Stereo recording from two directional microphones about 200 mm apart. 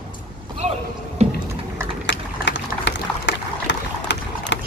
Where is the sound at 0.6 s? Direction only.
35° right (ahead or behind).